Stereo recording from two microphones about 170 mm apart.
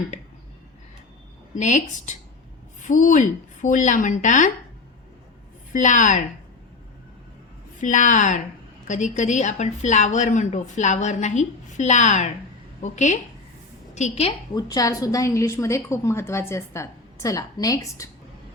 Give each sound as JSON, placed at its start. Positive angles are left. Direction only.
{"t": 1.5, "sound": "a woman's voice", "side_deg": 45}
{"t": 5.7, "sound": "a woman's voice", "side_deg": 45}
{"t": 7.8, "sound": "a woman's voice", "side_deg": 50}
{"t": 14.5, "sound": "a woman's voice", "side_deg": 20}